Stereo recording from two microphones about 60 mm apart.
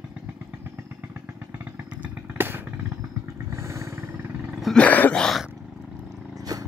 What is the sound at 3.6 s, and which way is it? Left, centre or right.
Vehicle, right.